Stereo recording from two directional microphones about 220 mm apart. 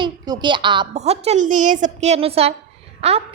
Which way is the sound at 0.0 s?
20° right (ahead or behind).